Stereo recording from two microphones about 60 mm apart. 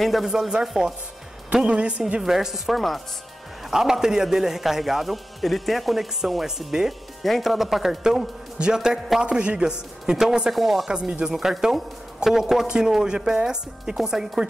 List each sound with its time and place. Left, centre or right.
0.0 s a man's voice: centre
0.3 s a man's voice: centre
2.2 s a man's voice: centre
10.5 s a man's voice: centre
10.9 s a man's voice: centre
11.3 s a man's voice: centre